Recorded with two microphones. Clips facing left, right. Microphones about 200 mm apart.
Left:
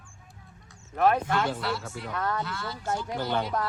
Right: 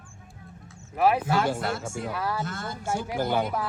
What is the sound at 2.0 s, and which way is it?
Speech, 10° right (ahead or behind).